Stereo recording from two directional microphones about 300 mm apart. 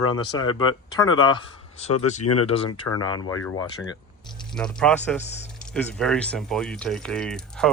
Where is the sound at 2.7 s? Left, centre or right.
Left.